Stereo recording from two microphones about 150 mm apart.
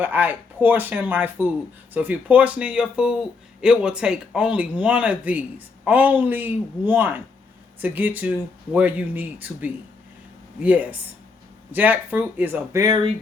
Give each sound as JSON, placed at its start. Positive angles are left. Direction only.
{"t": 0.0, "sound": "speech", "side_deg": -15}